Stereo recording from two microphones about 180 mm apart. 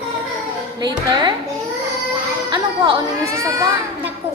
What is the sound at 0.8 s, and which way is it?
Speech, 25° right (ahead or behind).